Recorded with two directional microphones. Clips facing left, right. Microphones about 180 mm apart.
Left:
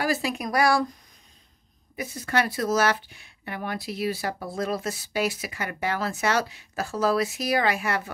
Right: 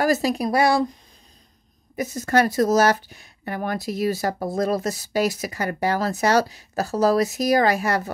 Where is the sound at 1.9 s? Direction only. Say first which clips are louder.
Right 6 dB; 45° right (ahead or behind).